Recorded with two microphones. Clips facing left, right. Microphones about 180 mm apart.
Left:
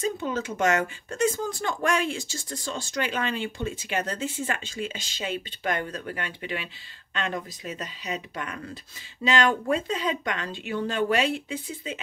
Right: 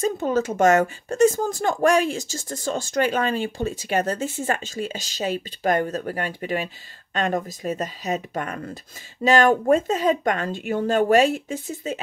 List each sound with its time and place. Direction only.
0.0 s speech: 45° right (ahead or behind)